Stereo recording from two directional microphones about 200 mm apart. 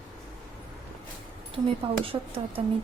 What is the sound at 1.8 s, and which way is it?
Speech, 25° right (ahead or behind).